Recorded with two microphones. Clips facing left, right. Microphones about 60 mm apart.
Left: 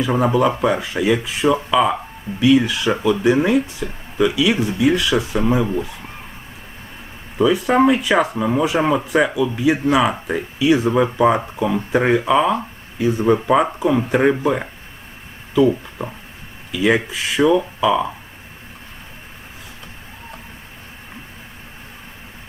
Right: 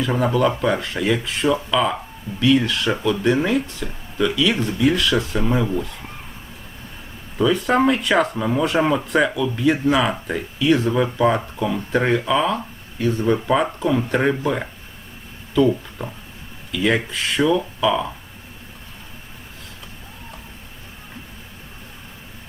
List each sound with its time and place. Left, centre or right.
0.0 s speech: centre
7.3 s speech: centre